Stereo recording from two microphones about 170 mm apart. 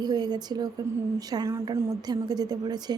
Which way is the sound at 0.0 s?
25° right (ahead or behind).